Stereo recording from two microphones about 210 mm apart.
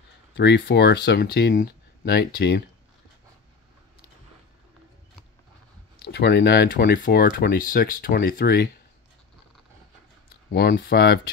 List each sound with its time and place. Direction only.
0.3 s speech: 55° left (ahead or behind)
6.0 s speech: 50° left (ahead or behind)
10.5 s speech: 50° left (ahead or behind)